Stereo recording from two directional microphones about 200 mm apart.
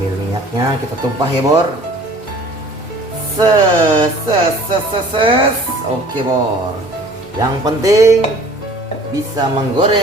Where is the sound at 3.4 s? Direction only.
20° right (ahead or behind).